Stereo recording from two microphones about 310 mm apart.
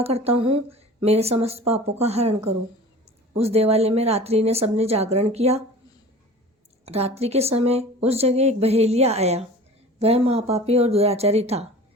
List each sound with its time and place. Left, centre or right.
0.0 s speech: centre
6.8 s speech: centre